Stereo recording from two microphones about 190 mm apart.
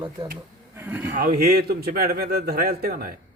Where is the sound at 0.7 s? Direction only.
10° right (ahead or behind).